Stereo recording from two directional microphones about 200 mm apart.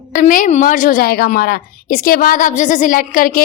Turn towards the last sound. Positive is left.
turn(degrees=45)  # may be behind; listen again after turning